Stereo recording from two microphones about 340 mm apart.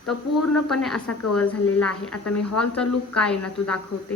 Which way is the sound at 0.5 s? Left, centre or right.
Centre.